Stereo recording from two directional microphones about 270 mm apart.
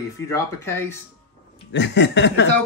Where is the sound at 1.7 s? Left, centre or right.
Left.